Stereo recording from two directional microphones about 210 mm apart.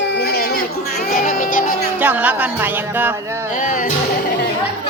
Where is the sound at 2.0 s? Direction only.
5° right (ahead or behind).